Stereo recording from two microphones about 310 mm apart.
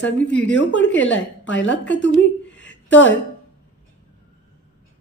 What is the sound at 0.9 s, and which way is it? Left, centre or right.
Speech, left.